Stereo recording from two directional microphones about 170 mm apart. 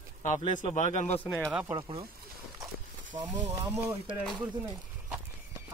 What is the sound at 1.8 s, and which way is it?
Speech, 30° right (ahead or behind).